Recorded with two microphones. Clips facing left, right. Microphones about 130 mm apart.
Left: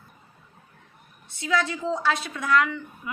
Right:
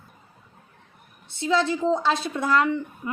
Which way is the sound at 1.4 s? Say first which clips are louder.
Right 4 dB; 25° right (ahead or behind).